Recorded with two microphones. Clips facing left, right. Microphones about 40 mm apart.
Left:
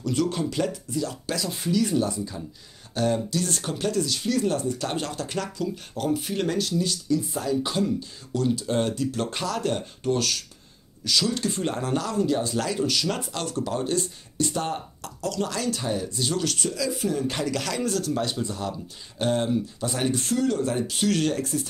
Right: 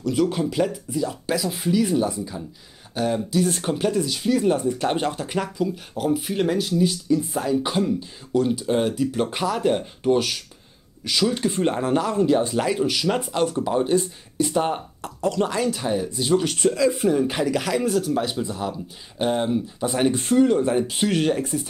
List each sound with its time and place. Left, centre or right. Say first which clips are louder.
0.0 s speech: right 4 dB; centre